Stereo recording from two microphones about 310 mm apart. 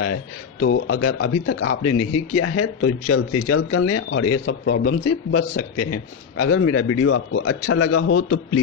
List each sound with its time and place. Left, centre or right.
0.0 s speech: left